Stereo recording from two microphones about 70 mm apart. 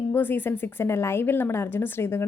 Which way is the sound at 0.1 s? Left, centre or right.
Left.